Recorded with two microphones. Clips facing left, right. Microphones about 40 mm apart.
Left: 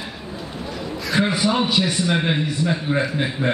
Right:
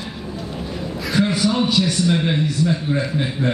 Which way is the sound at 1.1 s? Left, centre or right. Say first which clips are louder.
Right 1 dB; centre.